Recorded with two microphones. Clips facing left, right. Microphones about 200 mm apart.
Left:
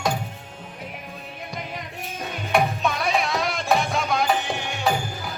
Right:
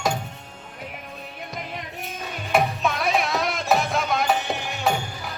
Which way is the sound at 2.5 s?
Centre (ahead or behind).